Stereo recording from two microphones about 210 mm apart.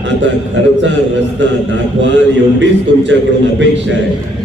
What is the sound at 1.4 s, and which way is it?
Speech, 60° right (ahead or behind).